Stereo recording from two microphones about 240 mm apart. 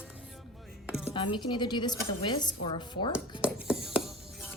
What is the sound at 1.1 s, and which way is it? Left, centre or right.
A woman's voice, left.